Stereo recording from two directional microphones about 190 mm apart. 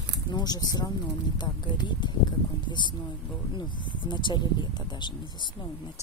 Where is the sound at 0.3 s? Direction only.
20° left (ahead or behind).